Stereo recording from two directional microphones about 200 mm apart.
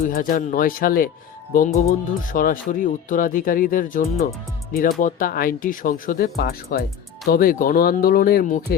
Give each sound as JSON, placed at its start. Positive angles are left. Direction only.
{"t": 0.1, "sound": "speech", "side_deg": 45}